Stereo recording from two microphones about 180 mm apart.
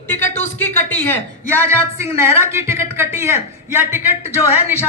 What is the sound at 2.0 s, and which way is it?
A man's voice, 15° right (ahead or behind).